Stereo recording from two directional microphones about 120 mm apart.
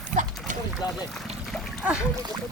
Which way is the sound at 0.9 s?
Centre (ahead or behind).